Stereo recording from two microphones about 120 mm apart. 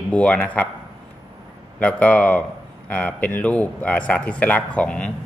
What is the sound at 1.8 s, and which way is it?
Speech, 10° left (ahead or behind).